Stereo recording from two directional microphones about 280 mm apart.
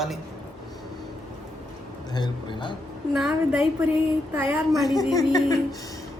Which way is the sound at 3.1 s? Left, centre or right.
Centre.